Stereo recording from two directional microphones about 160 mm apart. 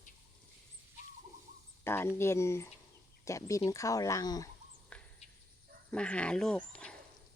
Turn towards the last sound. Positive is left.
turn(degrees=5)  # may be behind; listen again after turning